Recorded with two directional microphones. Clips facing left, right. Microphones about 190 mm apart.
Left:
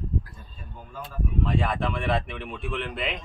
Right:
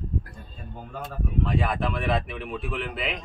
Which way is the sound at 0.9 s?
65° right (ahead or behind).